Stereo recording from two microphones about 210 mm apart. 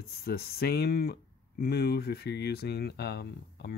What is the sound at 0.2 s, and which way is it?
Speech, 50° left (ahead or behind).